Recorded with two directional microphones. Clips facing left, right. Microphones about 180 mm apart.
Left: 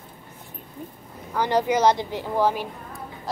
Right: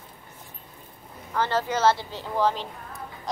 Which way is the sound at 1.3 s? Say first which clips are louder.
Left 4 dB; 15° left (ahead or behind).